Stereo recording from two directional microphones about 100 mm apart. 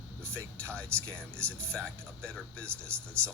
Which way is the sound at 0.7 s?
10° left (ahead or behind).